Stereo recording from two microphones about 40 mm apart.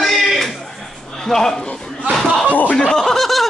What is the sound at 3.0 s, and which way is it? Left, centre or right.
Snicker, centre.